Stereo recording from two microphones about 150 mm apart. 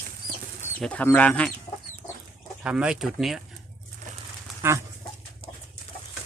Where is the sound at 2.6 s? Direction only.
5° right (ahead or behind).